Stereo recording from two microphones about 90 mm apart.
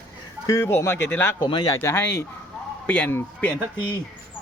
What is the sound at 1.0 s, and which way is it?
Speech, 20° left (ahead or behind).